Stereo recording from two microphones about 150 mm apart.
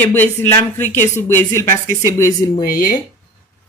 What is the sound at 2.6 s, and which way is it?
Speech, 70° left (ahead or behind).